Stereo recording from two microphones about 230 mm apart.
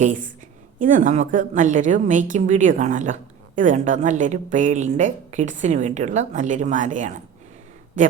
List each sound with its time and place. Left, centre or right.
0.0 s a woman's voice: right